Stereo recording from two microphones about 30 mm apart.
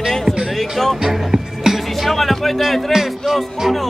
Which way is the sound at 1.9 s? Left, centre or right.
Centre.